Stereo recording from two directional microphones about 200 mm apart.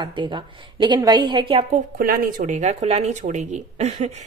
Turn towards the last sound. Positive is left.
turn(degrees=-35)  # may be behind; listen again after turning